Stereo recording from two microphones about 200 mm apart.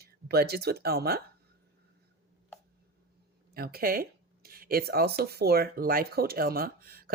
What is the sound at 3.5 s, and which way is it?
Speech, 50° right (ahead or behind).